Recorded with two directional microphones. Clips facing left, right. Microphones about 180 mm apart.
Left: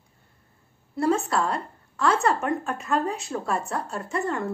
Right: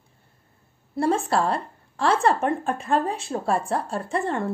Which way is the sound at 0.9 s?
30° right (ahead or behind).